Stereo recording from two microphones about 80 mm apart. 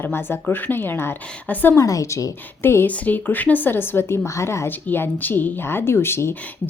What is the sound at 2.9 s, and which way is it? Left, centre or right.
A woman's voice, centre.